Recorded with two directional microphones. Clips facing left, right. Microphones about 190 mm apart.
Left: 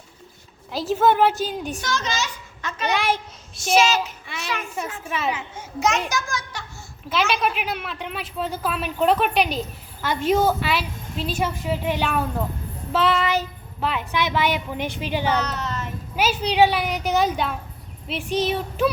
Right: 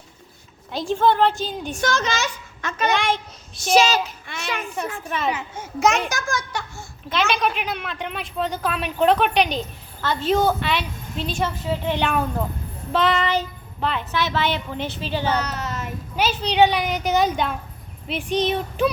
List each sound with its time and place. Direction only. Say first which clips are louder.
0.7 s a woman's voice: even; 5° left (ahead or behind)
1.8 s a child's voice: right 7 dB; 55° right (ahead or behind)
2.9 s a woman's voice: even; 5° left (ahead or behind)
3.8 s speech: right 1 dB; 35° right (ahead or behind)
4.7 s a woman's voice: right 1 dB; centre (ahead or behind)
6.1 s a child's voice: right 1 dB; 55° right (ahead or behind)
7.1 s a woman's voice: even; 5° left (ahead or behind)
15.4 s child singing: even; 5° right (ahead or behind)
16.1 s a woman's voice: even; 10° left (ahead or behind)